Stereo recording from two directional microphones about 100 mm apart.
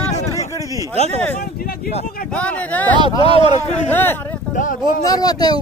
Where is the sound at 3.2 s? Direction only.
80° left.